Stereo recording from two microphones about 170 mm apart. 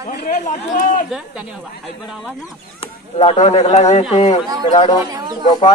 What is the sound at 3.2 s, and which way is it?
Speech, 40° left (ahead or behind).